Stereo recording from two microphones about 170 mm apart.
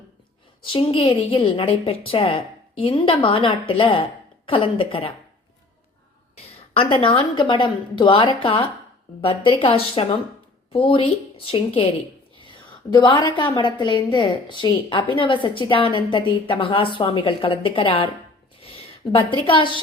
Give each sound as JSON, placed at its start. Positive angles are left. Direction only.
{"t": 0.6, "sound": "a woman's voice", "side_deg": 30}
{"t": 6.9, "sound": "a woman's voice", "side_deg": 35}
{"t": 12.9, "sound": "a woman's voice", "side_deg": 25}